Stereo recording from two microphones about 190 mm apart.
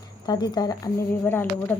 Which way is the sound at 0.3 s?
20° left (ahead or behind).